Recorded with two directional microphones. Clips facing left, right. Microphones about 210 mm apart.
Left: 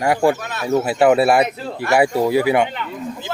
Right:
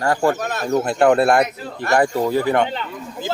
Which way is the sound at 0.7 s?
5° left (ahead or behind).